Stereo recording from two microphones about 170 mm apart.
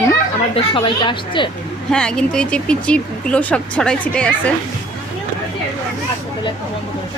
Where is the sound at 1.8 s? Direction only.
5° left (ahead or behind).